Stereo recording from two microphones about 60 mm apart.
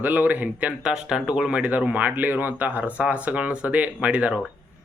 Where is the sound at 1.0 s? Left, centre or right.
Centre.